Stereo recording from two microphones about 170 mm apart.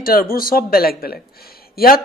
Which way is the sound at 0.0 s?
60° left (ahead or behind).